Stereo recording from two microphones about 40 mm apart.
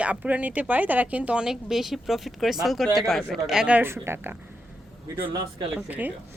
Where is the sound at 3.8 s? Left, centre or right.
Right.